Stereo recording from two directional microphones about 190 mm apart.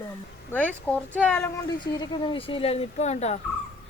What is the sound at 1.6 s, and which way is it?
Speech, 25° left (ahead or behind).